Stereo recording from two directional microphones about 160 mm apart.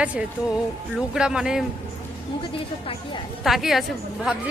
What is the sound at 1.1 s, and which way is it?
Speech, 5° right (ahead or behind).